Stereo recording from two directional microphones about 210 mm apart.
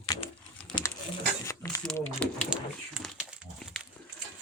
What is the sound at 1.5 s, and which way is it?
Speech, 10° left (ahead or behind).